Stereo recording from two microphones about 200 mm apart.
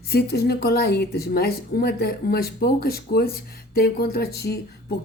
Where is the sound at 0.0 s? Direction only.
55° left (ahead or behind).